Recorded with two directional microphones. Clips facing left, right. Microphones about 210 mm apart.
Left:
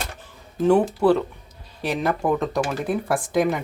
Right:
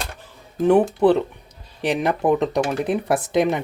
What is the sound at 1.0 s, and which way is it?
Speech, 20° right (ahead or behind).